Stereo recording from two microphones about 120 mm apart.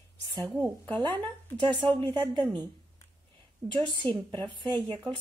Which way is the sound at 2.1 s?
40° right (ahead or behind).